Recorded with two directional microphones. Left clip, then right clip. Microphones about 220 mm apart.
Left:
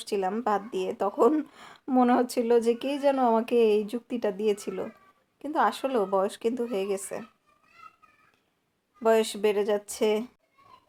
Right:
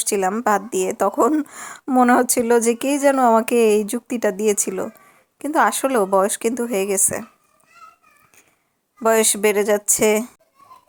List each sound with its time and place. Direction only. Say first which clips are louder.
0.0 s a woman's voice: right 8 dB; 30° right (ahead or behind)
9.0 s a woman's voice: right 6 dB; 25° right (ahead or behind)